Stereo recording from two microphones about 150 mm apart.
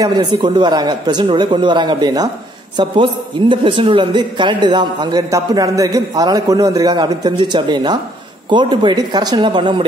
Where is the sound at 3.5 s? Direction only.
35° right (ahead or behind).